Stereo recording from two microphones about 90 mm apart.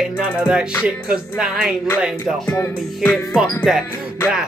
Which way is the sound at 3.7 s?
5° right (ahead or behind).